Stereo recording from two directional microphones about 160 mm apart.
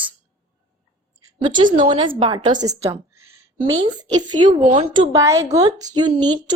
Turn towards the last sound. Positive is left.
turn(degrees=-25)  # may be behind; listen again after turning